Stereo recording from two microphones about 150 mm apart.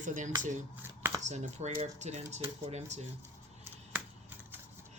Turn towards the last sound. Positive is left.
turn(degrees=-15)  # may be behind; listen again after turning